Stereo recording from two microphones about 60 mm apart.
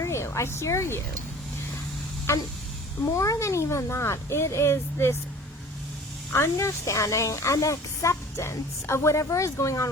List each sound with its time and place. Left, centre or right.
0.0 s a woman's voice: left
2.3 s speech: left
6.3 s a woman's voice: left